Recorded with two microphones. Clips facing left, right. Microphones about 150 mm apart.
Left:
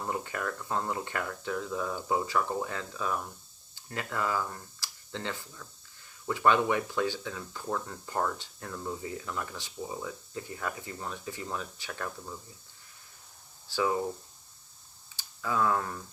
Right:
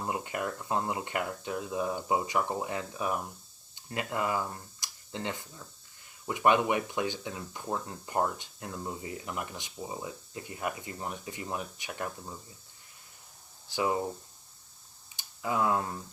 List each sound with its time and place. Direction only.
0.1 s speech: 20° right (ahead or behind)
13.7 s speech: 20° right (ahead or behind)
15.1 s speech: 20° right (ahead or behind)